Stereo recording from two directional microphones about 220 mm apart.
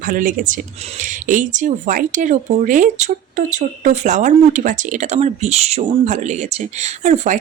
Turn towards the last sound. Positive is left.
turn(degrees=-30)  # may be behind; listen again after turning